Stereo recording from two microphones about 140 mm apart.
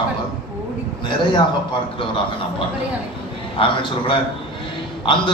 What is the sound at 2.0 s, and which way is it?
A man's voice, 40° left (ahead or behind).